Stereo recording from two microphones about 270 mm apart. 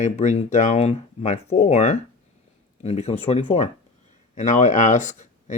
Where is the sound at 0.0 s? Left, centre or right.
Left.